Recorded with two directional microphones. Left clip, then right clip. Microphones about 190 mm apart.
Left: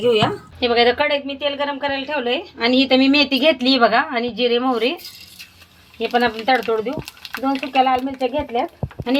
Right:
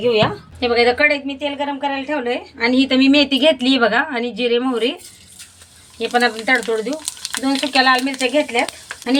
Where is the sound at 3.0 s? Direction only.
20° right (ahead or behind).